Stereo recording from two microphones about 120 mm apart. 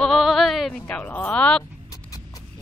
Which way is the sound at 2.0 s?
30° left (ahead or behind).